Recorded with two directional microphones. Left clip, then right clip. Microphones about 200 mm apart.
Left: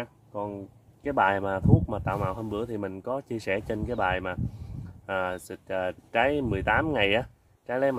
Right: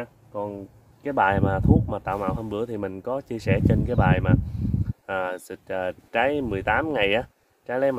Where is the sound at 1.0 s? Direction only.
15° right (ahead or behind).